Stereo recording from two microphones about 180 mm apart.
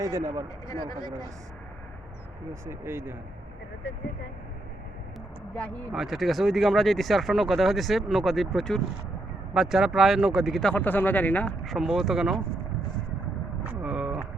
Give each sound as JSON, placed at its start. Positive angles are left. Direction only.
{"t": 0.0, "sound": "speech", "side_deg": -20}
{"t": 0.7, "sound": "speech", "side_deg": 20}
{"t": 2.5, "sound": "speech", "side_deg": -15}
{"t": 5.5, "sound": "speech", "side_deg": 5}
{"t": 13.6, "sound": "vehicle", "side_deg": -5}